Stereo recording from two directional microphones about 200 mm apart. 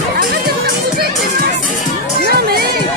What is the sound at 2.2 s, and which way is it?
Music, 50° right (ahead or behind).